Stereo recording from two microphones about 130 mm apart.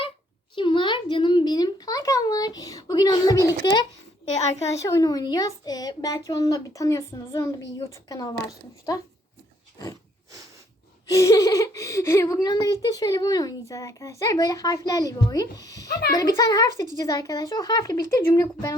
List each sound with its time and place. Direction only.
0.5 s a child's voice: 40° left (ahead or behind)
11.1 s speech: 25° left (ahead or behind)